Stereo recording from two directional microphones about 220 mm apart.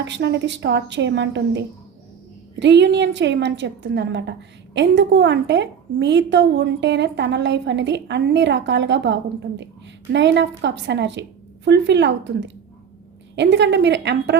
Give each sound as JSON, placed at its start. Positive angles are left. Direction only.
{"t": 0.0, "sound": "a woman's voice", "side_deg": -50}